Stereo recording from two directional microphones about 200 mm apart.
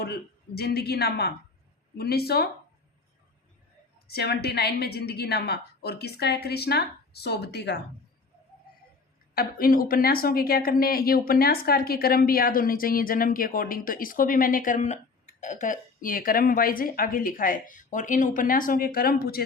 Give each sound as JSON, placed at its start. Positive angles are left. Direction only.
{"t": 0.0, "sound": "a woman's voice", "side_deg": 55}
{"t": 4.0, "sound": "a woman's voice", "side_deg": 50}
{"t": 9.3, "sound": "a woman's voice", "side_deg": 45}